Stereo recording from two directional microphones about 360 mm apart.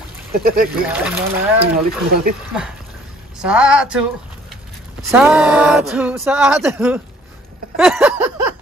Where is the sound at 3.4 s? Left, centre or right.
Centre.